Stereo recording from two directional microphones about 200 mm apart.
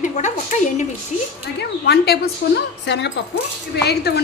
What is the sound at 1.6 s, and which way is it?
A woman's voice, 55° left (ahead or behind).